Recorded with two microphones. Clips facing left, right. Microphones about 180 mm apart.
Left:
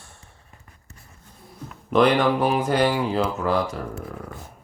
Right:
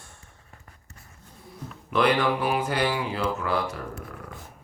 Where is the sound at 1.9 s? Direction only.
40° left (ahead or behind).